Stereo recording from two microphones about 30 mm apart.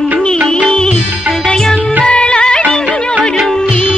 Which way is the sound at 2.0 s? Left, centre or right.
Left.